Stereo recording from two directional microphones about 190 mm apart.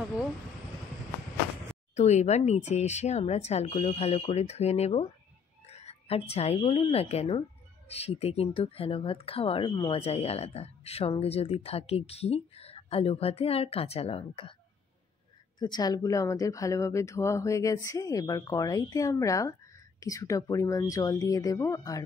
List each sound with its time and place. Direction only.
2.0 s a woman's voice: 35° left (ahead or behind)
15.6 s speech: 20° left (ahead or behind)